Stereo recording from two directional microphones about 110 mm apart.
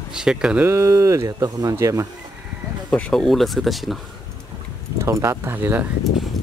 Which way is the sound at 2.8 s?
10° left (ahead or behind).